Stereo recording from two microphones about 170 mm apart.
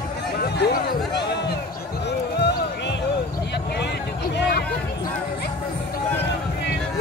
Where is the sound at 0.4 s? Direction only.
70° left (ahead or behind).